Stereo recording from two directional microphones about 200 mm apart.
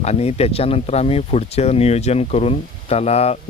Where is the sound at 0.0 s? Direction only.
30° left (ahead or behind).